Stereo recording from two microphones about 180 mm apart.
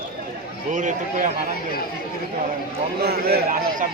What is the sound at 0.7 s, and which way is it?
Speech, 45° right (ahead or behind).